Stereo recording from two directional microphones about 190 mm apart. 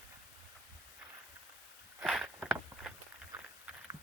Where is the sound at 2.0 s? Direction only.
Centre (ahead or behind).